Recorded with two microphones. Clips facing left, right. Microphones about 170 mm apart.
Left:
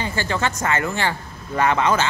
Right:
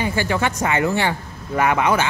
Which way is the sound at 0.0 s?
15° right (ahead or behind).